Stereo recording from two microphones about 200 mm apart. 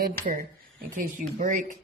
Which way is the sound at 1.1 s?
40° right (ahead or behind).